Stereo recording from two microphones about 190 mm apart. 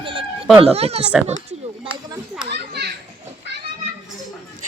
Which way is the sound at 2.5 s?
60° right (ahead or behind).